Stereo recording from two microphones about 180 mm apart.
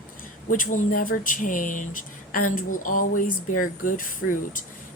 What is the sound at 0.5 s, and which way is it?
Speech, 45° left (ahead or behind).